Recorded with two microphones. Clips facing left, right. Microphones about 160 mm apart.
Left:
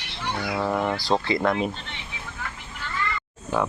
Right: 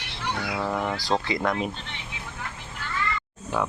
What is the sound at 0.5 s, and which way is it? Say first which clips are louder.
Speech: left 4 dB; 10° left (ahead or behind).